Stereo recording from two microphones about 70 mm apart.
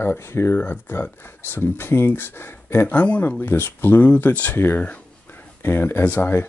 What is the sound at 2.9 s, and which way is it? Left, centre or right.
Speech, left.